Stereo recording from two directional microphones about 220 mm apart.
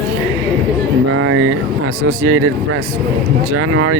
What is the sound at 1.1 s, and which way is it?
Speech, 70° right (ahead or behind).